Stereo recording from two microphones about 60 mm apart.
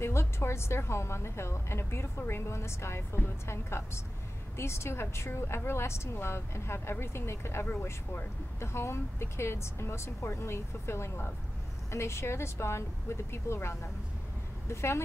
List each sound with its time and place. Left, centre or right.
0.0 s speech: left